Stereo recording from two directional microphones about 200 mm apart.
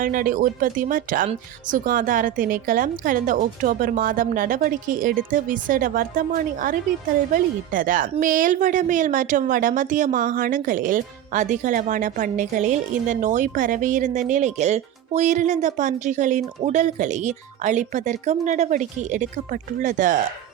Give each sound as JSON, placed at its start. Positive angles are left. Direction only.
{"t": 0.0, "sound": "a woman's voice", "side_deg": -45}